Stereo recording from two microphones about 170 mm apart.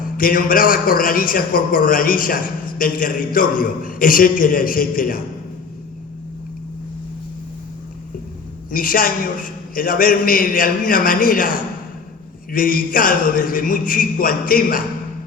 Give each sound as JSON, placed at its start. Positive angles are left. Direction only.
{"t": 0.0, "sound": "a man's voice", "side_deg": 55}
{"t": 8.7, "sound": "a man's voice", "side_deg": 55}